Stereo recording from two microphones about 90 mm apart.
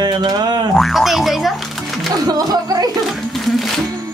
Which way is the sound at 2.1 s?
45° right (ahead or behind).